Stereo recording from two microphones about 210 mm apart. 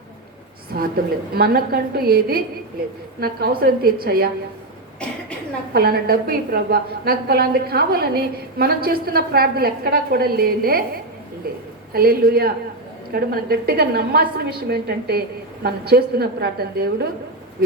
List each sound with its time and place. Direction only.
0.7 s a woman's voice: 50° right (ahead or behind)
5.7 s a woman's voice: 45° right (ahead or behind)